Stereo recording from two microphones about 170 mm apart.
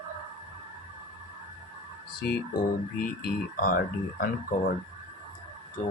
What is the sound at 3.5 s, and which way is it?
Speech, 55° left (ahead or behind).